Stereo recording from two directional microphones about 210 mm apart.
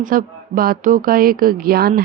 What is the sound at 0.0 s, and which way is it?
Speech, 40° right (ahead or behind).